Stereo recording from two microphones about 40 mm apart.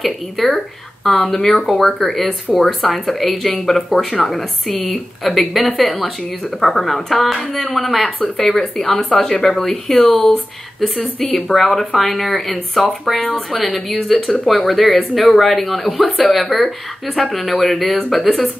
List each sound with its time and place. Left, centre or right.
0.0 s speech: centre
1.0 s speech: centre
8.2 s speech: centre
16.0 s speech: centre
16.3 s speech: centre